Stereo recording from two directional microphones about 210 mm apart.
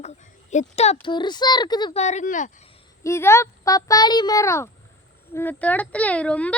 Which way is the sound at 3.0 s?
10° left (ahead or behind).